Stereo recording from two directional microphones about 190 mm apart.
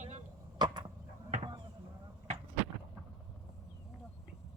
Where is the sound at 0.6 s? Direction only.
25° right (ahead or behind).